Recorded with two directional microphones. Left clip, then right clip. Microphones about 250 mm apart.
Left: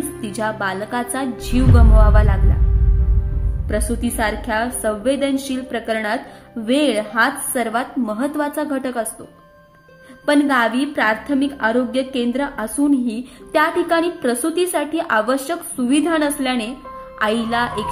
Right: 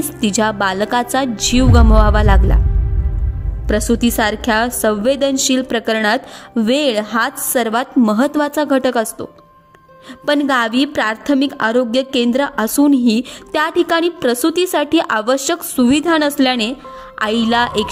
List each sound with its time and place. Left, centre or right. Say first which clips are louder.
0.2 s a woman's voice: right 7 dB; right
3.6 s a woman's voice: right 7 dB; right
10.2 s a woman's voice: right 1 dB; right